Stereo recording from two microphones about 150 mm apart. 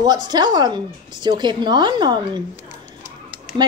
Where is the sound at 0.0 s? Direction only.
25° right (ahead or behind).